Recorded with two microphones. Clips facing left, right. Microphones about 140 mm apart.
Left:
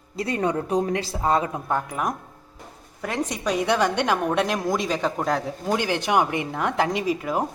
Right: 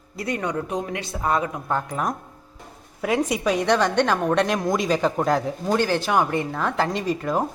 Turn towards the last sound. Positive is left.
turn(degrees=10)  # may be behind; listen again after turning